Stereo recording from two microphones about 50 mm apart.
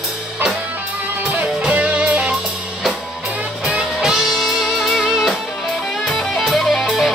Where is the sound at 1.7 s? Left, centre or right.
Right.